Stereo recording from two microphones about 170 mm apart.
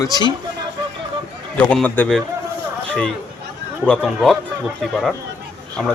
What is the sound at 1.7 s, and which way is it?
Speech, 5° left (ahead or behind).